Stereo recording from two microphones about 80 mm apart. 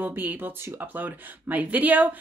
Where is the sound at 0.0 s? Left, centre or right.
Right.